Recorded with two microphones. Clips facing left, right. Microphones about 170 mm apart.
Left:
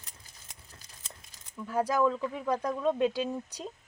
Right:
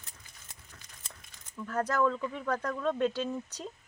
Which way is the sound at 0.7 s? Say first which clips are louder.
Even; 35° left (ahead or behind).